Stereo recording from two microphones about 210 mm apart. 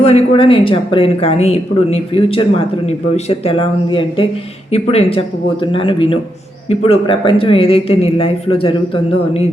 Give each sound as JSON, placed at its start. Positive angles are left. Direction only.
{"t": 0.0, "sound": "speech", "side_deg": 30}